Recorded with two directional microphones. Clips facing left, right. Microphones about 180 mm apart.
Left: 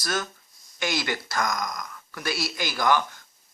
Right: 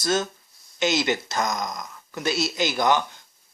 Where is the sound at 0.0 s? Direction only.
25° right (ahead or behind).